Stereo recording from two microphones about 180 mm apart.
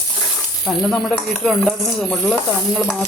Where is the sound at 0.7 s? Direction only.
Centre (ahead or behind).